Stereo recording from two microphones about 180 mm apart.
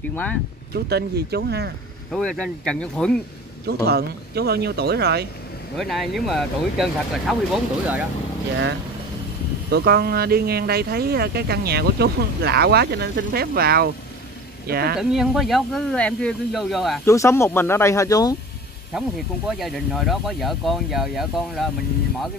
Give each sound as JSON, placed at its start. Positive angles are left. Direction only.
{"t": 0.1, "sound": "speech", "side_deg": 10}
{"t": 0.7, "sound": "speech", "side_deg": -65}
{"t": 2.1, "sound": "speech", "side_deg": 5}
{"t": 3.6, "sound": "speech", "side_deg": -60}
{"t": 5.8, "sound": "speech", "side_deg": 0}
{"t": 9.7, "sound": "speech", "side_deg": -65}
{"t": 15.0, "sound": "speech", "side_deg": 0}
{"t": 17.0, "sound": "speech", "side_deg": 15}
{"t": 18.9, "sound": "speech", "side_deg": 0}